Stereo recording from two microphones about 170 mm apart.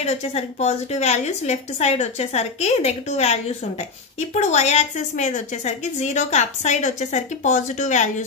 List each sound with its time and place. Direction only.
0.0 s a woman's voice: 40° left (ahead or behind)